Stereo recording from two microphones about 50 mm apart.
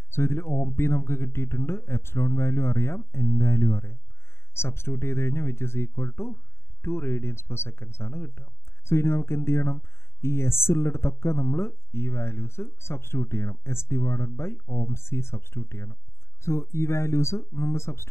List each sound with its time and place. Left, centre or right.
0.1 s speech: left